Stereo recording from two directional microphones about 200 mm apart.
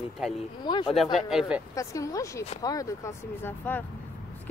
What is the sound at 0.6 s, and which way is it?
Speech, 20° left (ahead or behind).